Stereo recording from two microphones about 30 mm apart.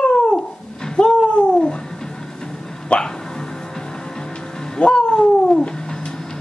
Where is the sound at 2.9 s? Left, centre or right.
Left.